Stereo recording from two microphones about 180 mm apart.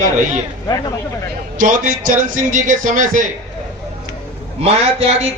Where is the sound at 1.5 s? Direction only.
45° right (ahead or behind).